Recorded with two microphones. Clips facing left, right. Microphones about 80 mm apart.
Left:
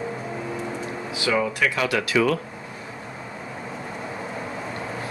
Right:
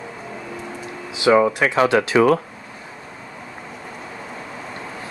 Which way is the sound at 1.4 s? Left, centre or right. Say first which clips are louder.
Right 7 dB; right.